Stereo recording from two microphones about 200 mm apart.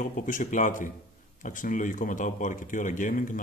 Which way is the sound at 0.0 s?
40° left (ahead or behind).